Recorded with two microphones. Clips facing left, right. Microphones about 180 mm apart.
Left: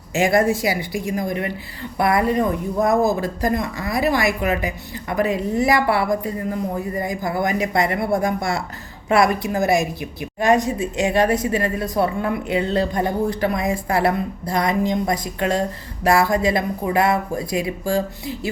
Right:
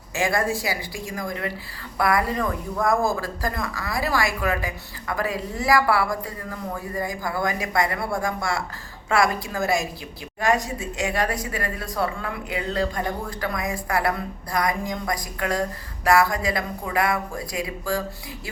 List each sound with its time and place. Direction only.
0.1 s speech: 20° left (ahead or behind)